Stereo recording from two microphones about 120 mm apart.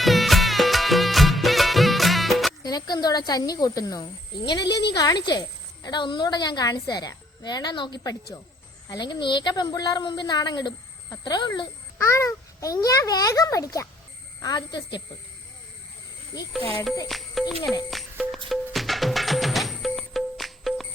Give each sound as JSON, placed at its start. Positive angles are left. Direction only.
{"t": 0.0, "sound": "music", "side_deg": 0}
{"t": 2.6, "sound": "a woman's voice", "side_deg": 35}
{"t": 11.9, "sound": "a child's voice", "side_deg": 25}
{"t": 14.4, "sound": "a woman's voice", "side_deg": 40}
{"t": 17.1, "sound": "speech", "side_deg": 0}
{"t": 17.9, "sound": "music", "side_deg": 0}